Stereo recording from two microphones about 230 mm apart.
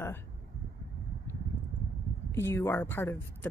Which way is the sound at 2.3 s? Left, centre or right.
Centre.